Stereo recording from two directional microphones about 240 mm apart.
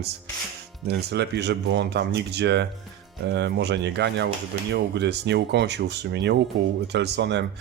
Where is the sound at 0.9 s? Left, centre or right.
Right.